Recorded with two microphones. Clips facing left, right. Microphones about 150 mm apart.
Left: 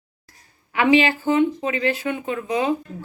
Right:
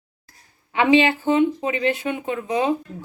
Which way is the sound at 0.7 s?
20° right (ahead or behind).